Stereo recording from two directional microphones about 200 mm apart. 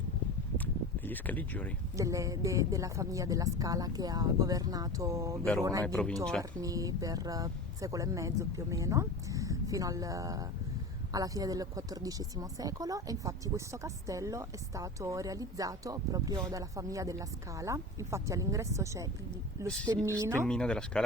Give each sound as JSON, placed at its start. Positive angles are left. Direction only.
{"t": 0.5, "sound": "a sound", "side_deg": 10}
{"t": 2.0, "sound": "a woman's voice", "side_deg": -15}
{"t": 5.8, "sound": "speech", "side_deg": 5}
{"t": 6.6, "sound": "a woman's voice", "side_deg": -15}
{"t": 19.6, "sound": "speech", "side_deg": 5}
{"t": 20.1, "sound": "a woman's voice", "side_deg": -15}
{"t": 20.5, "sound": "speech", "side_deg": 5}